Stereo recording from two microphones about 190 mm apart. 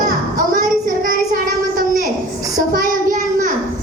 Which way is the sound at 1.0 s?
45° right (ahead or behind).